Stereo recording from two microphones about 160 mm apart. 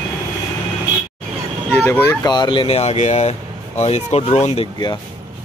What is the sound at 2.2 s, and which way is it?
Speech, 25° left (ahead or behind).